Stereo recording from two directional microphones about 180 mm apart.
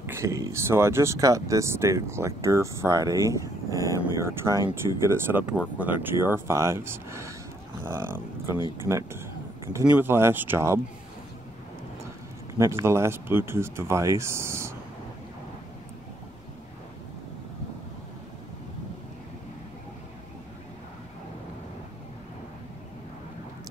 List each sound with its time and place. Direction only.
0.0 s speech: 15° right (ahead or behind)
3.7 s speech: 20° left (ahead or behind)
4.0 s speech: 15° right (ahead or behind)
12.5 s speech: 15° right (ahead or behind)